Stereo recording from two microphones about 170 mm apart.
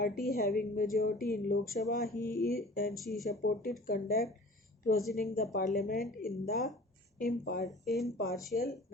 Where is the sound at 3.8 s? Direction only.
60° left (ahead or behind).